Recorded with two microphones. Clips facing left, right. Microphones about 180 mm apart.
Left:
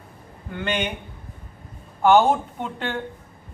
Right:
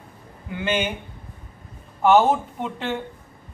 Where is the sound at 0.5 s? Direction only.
5° right (ahead or behind).